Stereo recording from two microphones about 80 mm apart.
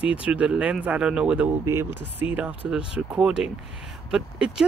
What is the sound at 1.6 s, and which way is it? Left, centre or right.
Speech, right.